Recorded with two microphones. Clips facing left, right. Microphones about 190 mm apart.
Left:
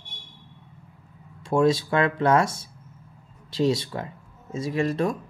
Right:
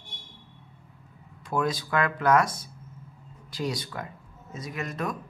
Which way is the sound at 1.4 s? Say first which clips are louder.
Left 8 dB; 25° left (ahead or behind).